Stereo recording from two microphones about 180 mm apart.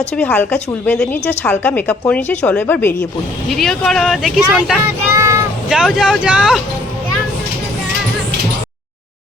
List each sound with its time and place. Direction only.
0.2 s a woman's voice: 10° left (ahead or behind)
4.9 s child singing: 15° right (ahead or behind)
5.6 s speech: 5° right (ahead or behind)